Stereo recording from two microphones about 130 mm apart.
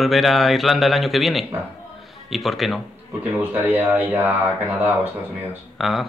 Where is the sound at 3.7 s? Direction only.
15° right (ahead or behind).